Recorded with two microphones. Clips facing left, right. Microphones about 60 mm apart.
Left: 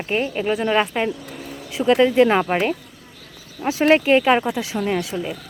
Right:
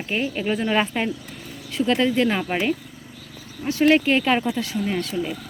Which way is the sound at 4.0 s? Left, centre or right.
Centre.